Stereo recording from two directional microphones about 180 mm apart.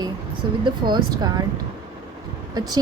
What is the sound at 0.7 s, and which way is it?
Speech, 25° right (ahead or behind).